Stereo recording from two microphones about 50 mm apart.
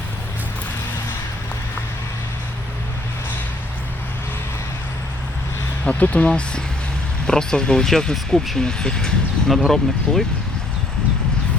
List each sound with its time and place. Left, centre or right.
5.8 s speech: left
9.5 s speech: centre